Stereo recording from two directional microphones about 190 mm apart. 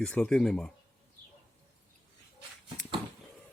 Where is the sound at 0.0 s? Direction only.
5° left (ahead or behind).